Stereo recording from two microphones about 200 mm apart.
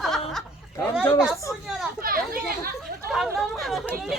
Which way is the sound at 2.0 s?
45° right (ahead or behind).